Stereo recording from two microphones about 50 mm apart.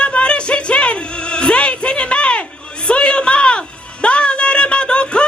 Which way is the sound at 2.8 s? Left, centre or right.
Left.